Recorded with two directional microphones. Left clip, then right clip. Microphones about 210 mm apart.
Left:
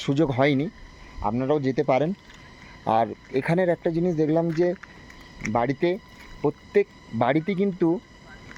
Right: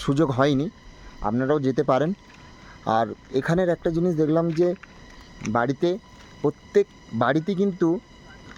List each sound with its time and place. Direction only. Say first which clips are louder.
0.0 s speech: right 1 dB; 20° right (ahead or behind)
5.5 s speech: right 1 dB; 15° right (ahead or behind)